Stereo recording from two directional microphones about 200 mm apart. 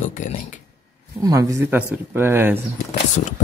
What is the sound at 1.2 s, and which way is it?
Speech, 15° right (ahead or behind).